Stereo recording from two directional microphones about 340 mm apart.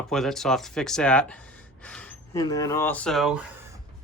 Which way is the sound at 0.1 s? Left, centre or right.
Centre.